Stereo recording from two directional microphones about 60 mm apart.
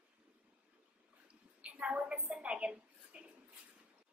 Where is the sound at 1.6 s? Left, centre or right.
Centre.